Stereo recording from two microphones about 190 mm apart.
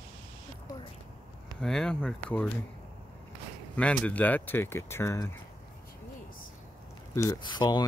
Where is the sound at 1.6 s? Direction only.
5° left (ahead or behind).